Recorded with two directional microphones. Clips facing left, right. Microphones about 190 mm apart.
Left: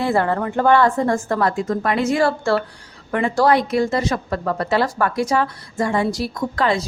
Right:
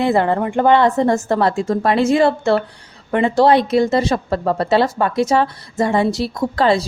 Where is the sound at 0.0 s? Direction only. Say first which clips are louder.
Right 3 dB; 20° right (ahead or behind).